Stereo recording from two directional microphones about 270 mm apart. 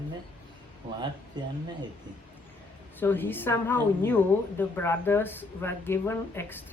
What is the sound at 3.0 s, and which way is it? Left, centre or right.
Speech, centre.